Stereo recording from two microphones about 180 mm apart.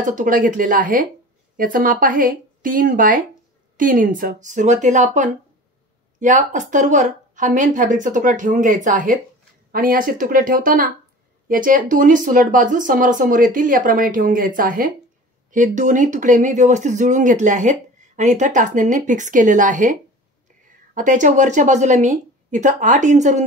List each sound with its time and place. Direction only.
0.0 s speech: 45° right (ahead or behind)